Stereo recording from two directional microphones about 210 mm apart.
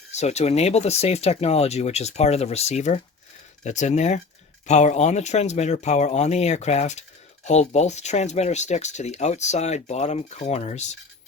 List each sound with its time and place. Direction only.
0.1 s speech: 30° left (ahead or behind)